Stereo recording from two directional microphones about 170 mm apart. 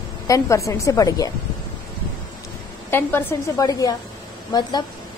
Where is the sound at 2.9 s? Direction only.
15° left (ahead or behind).